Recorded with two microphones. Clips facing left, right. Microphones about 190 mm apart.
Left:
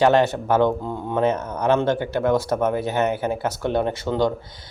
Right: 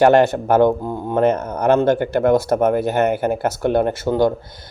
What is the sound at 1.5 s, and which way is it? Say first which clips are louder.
Speech: right 5 dB; 50° right (ahead or behind).